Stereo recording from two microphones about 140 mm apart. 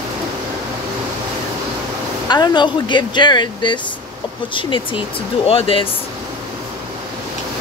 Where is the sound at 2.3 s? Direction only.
30° left (ahead or behind).